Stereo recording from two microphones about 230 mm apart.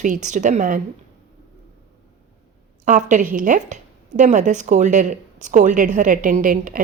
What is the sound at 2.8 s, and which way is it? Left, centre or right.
A woman's voice, right.